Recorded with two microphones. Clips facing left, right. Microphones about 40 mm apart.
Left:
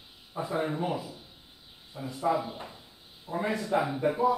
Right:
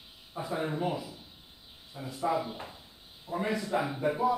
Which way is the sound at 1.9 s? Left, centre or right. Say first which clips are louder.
Left 3 dB; centre.